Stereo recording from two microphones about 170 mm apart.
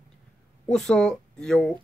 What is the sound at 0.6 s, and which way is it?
Speech, centre (ahead or behind).